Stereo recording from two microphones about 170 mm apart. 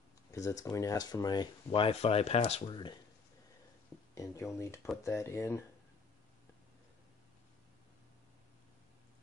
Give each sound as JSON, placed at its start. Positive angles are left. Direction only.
{"t": 0.3, "sound": "speech", "side_deg": 20}
{"t": 4.1, "sound": "speech", "side_deg": 15}